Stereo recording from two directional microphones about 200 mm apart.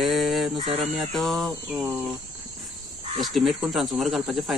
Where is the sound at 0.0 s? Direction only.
Centre (ahead or behind).